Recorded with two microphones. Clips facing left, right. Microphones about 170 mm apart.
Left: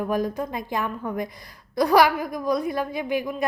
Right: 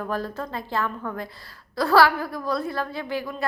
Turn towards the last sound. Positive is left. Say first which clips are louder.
# left 3 dB
turn(degrees=15)  # may be behind; listen again after turning